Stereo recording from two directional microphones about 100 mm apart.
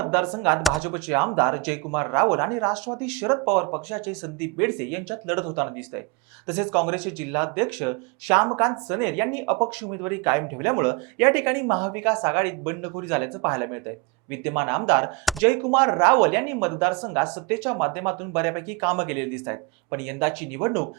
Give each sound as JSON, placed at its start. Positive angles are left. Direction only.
{"t": 0.0, "sound": "speech", "side_deg": -20}